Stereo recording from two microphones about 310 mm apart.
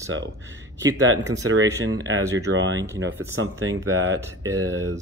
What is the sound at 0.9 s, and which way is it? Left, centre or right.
Speech, right.